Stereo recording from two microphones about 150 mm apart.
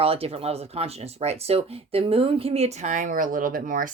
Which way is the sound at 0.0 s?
40° right (ahead or behind).